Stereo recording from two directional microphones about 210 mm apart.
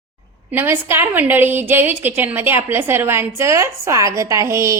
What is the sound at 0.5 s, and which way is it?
A woman's voice, 10° right (ahead or behind).